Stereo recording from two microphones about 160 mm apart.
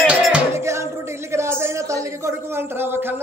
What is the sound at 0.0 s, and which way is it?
Music, 5° right (ahead or behind).